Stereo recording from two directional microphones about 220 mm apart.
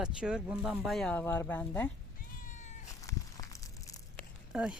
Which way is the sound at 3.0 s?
15° left (ahead or behind).